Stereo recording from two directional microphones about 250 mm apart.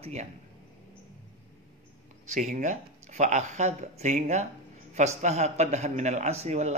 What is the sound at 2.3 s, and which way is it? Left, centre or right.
Speech, right.